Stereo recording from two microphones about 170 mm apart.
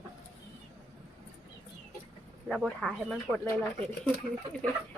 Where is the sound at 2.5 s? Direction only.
5° left (ahead or behind).